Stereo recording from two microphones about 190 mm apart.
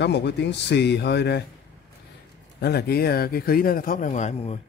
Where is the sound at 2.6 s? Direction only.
55° left (ahead or behind).